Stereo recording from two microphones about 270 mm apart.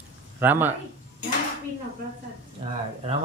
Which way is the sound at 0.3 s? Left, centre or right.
Centre.